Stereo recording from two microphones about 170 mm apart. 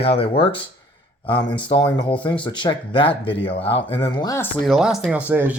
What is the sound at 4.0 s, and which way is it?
Speech, 20° left (ahead or behind).